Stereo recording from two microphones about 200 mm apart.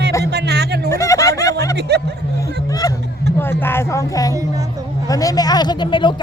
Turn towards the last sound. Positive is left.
turn(degrees=25)  # may be behind; listen again after turning